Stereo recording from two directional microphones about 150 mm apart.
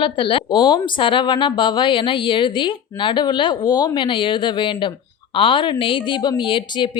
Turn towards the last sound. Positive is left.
turn(degrees=35)  # may be behind; listen again after turning